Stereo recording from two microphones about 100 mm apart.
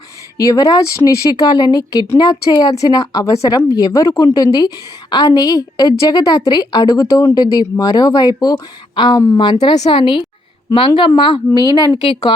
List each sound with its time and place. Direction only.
0.3 s a woman's voice: 35° left (ahead or behind)
7.5 s a woman's voice: 40° left (ahead or behind)